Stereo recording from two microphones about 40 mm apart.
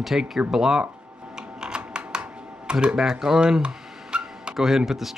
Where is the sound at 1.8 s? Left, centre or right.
Right.